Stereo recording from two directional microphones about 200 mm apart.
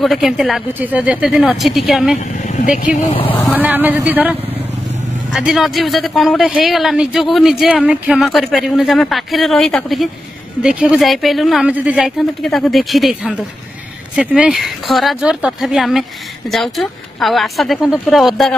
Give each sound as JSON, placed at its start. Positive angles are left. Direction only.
{"t": 0.0, "sound": "speech", "side_deg": 0}
{"t": 2.1, "sound": "speech", "side_deg": 40}
{"t": 3.1, "sound": "speech", "side_deg": 25}
{"t": 3.5, "sound": "a man's voice", "side_deg": -10}